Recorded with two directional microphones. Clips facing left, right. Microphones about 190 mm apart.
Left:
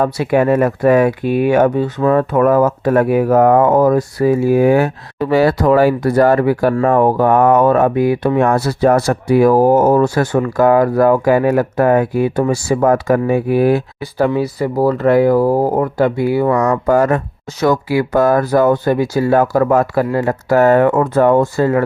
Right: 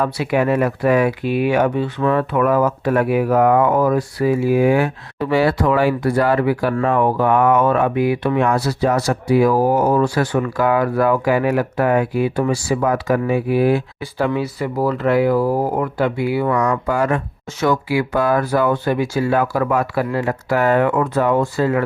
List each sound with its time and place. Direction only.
0.0 s speech: 45° left (ahead or behind)